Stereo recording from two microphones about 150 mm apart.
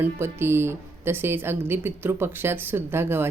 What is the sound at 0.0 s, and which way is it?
Speech, 15° right (ahead or behind).